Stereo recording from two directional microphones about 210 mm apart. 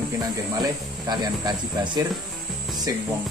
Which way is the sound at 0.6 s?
20° right (ahead or behind).